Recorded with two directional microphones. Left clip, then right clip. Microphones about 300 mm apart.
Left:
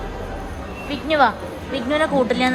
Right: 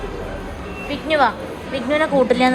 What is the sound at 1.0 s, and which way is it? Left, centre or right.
A woman's voice, centre.